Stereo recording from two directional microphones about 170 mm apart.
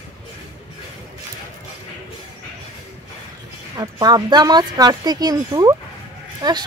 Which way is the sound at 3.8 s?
25° right (ahead or behind).